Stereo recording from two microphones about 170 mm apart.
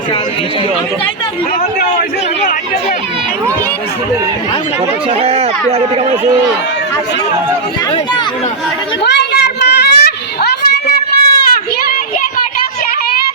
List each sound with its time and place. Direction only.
5.2 s speech: 35° right (ahead or behind)
9.0 s children playing: 80° left